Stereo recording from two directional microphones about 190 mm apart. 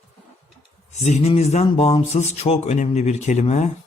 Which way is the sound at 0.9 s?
35° left (ahead or behind).